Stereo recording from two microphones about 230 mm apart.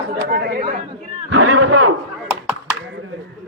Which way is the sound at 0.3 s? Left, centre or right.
Right.